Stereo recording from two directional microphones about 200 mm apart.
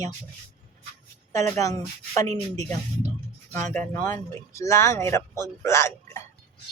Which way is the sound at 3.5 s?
10° left (ahead or behind).